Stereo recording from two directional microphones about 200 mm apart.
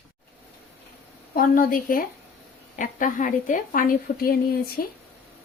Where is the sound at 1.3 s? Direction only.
45° left (ahead or behind).